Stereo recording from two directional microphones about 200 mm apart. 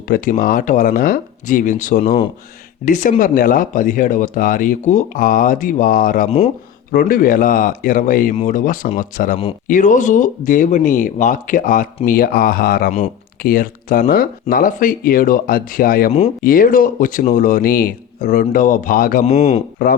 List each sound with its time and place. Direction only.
0.1 s speech: 45° left (ahead or behind)
6.9 s speech: 45° left (ahead or behind)
19.2 s speech: 30° left (ahead or behind)